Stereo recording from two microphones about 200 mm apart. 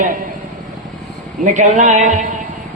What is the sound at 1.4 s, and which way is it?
Speech, 40° right (ahead or behind).